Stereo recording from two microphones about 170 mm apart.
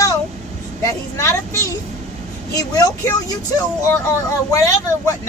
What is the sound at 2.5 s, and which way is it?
Speech, 20° left (ahead or behind).